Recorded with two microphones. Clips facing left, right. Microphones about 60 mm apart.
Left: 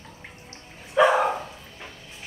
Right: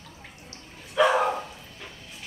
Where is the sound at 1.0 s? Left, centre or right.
Centre.